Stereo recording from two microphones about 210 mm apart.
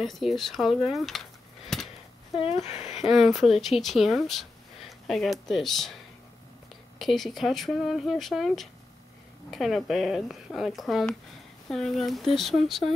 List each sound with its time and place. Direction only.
0.0 s speech: centre (ahead or behind)
2.4 s speech: 30° left (ahead or behind)
3.0 s speech: centre (ahead or behind)
7.0 s speech: centre (ahead or behind)